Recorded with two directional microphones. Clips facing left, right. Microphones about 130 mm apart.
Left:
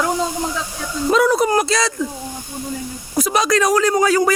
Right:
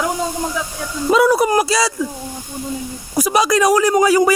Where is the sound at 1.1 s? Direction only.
10° right (ahead or behind).